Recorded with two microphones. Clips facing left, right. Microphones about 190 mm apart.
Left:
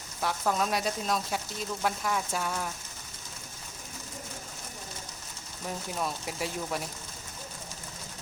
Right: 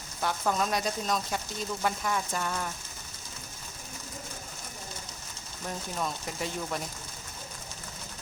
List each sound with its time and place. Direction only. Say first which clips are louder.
0.2 s speech: even; centre (ahead or behind)
5.6 s speech: even; 5° left (ahead or behind)